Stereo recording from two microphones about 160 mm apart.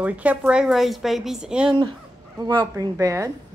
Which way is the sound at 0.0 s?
10° right (ahead or behind).